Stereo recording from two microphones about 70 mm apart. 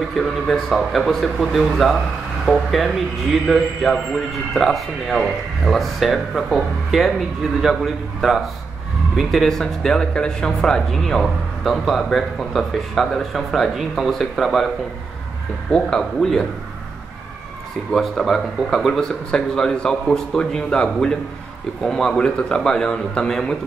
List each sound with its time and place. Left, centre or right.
0.2 s speech: centre
15.7 s speech: centre
17.9 s speech: centre